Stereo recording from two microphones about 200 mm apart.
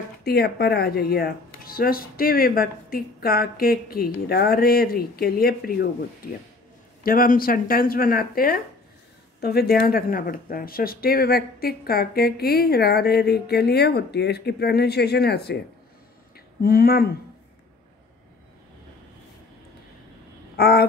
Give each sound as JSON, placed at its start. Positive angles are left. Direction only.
{"t": 0.2, "sound": "speech", "side_deg": 50}
{"t": 7.0, "sound": "speech", "side_deg": 45}
{"t": 20.5, "sound": "babbling", "side_deg": 50}